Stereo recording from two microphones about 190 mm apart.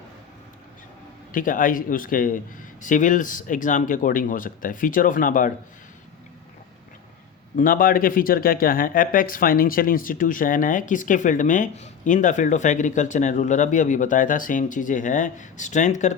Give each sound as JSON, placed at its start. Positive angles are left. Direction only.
{"t": 1.3, "sound": "speech", "side_deg": 45}
{"t": 7.5, "sound": "speech", "side_deg": 45}